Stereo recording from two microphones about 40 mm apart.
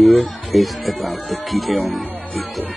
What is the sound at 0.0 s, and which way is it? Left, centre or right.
Speech, centre.